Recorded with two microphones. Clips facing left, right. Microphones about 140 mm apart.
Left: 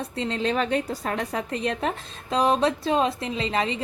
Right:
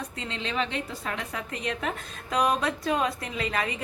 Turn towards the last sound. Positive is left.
turn(degrees=25)  # may be behind; listen again after turning